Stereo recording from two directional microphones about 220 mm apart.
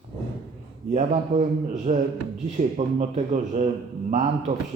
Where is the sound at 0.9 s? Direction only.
30° right (ahead or behind).